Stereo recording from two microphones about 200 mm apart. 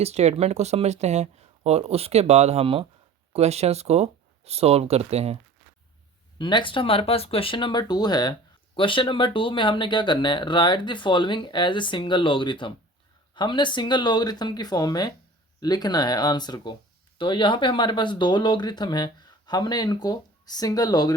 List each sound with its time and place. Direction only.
0.0 s speech: 35° right (ahead or behind)
6.4 s speech: 25° left (ahead or behind)